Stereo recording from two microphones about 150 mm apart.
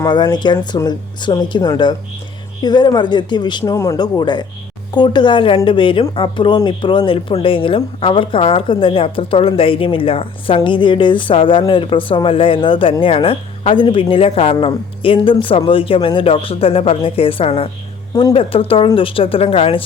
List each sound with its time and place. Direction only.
0.0 s speech: 30° left (ahead or behind)
18.1 s speech: 25° left (ahead or behind)
18.3 s speech: 35° left (ahead or behind)